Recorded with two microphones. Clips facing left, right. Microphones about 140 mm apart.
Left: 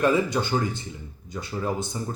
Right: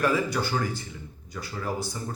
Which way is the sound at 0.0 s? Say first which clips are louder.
Left 3 dB; 20° left (ahead or behind).